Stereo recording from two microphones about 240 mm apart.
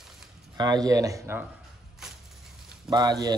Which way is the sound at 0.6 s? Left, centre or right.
Centre.